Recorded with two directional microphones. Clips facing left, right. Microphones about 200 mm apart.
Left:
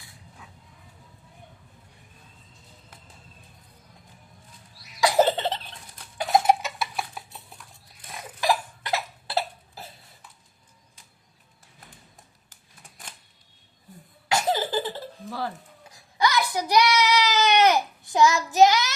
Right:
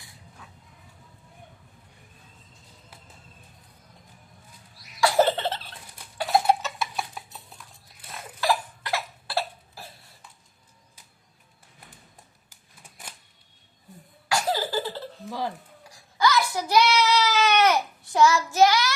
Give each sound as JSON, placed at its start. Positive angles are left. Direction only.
{"t": 4.9, "sound": "cough", "side_deg": 20}
{"t": 6.4, "sound": "clock", "side_deg": 15}
{"t": 6.7, "sound": "dishes", "side_deg": 5}
{"t": 8.1, "sound": "cough", "side_deg": 15}
{"t": 14.3, "sound": "cough", "side_deg": 20}
{"t": 15.3, "sound": "hiccup", "side_deg": -15}
{"t": 15.8, "sound": "child singing", "side_deg": 20}